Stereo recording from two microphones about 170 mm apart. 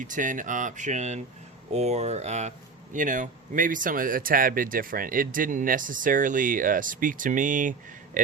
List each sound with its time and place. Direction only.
0.0 s speech: 50° right (ahead or behind)